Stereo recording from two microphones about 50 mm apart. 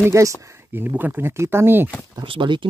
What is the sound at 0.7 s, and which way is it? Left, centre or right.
Speech, right.